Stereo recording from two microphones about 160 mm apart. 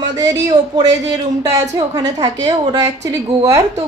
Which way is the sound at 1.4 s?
25° right (ahead or behind).